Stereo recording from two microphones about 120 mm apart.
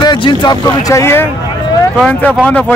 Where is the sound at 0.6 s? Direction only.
25° left (ahead or behind).